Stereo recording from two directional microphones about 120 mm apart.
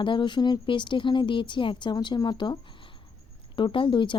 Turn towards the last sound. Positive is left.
turn(degrees=45)  # may be behind; listen again after turning